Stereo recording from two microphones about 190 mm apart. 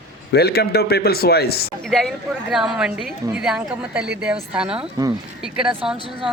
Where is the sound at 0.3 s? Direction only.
55° left (ahead or behind).